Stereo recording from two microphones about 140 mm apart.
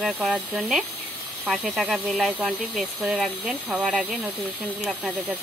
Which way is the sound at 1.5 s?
Centre (ahead or behind).